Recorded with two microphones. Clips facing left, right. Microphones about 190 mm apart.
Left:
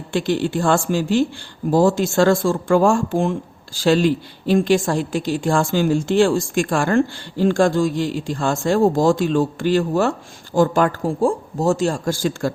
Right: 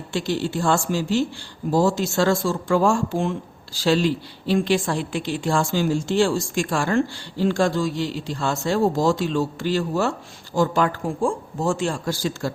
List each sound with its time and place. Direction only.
0.1 s a woman's voice: 55° left (ahead or behind)